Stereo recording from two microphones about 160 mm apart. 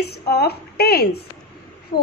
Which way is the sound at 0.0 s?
90° left.